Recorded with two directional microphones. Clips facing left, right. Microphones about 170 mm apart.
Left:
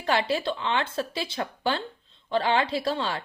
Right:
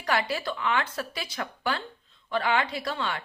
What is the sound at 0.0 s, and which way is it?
Speech, 25° left (ahead or behind).